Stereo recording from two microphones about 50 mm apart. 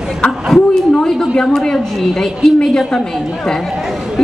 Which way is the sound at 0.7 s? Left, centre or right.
Centre.